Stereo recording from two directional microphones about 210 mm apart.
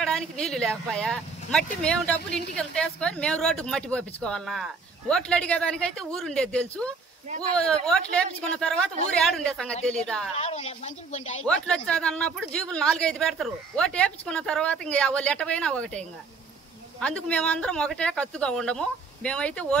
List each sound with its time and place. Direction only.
0.0 s speech: 5° left (ahead or behind)
10.3 s speech: 30° left (ahead or behind)
11.4 s speech: 5° left (ahead or behind)